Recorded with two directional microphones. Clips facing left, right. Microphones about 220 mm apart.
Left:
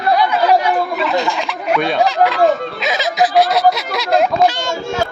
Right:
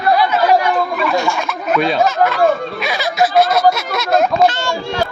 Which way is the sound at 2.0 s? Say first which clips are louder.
Even; 15° left (ahead or behind).